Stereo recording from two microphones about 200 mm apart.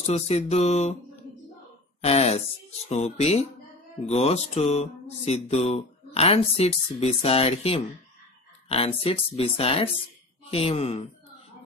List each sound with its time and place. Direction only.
0.0 s music: 30° left (ahead or behind)
2.0 s speech: 30° left (ahead or behind)
2.9 s music: 35° left (ahead or behind)
8.6 s speech: 30° left (ahead or behind)